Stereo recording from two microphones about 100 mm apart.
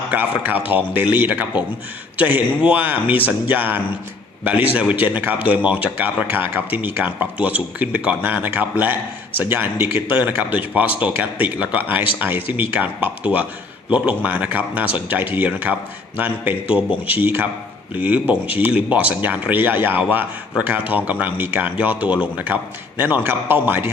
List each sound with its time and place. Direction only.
0.1 s speech: 20° right (ahead or behind)